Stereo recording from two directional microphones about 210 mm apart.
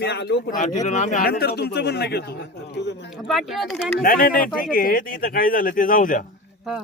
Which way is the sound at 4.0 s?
45° left (ahead or behind).